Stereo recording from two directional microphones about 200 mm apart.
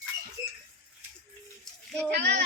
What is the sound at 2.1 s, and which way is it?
Speech, 55° right (ahead or behind).